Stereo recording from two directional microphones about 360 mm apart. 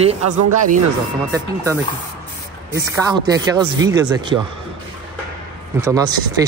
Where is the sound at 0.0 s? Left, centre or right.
Centre.